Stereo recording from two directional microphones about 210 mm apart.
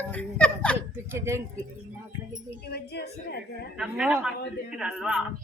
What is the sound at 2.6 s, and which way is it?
Speech, 50° left (ahead or behind).